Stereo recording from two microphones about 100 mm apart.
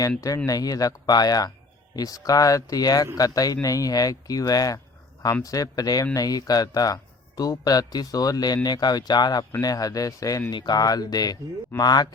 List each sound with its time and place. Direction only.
0.4 s speech: 35° left (ahead or behind)